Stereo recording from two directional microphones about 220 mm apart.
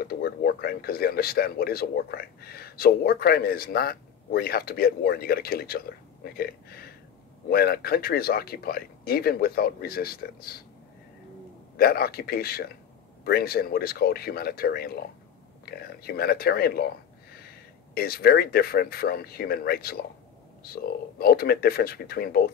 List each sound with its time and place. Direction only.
0.1 s speech: 45° left (ahead or behind)
11.7 s speech: 45° left (ahead or behind)
17.9 s speech: 45° left (ahead or behind)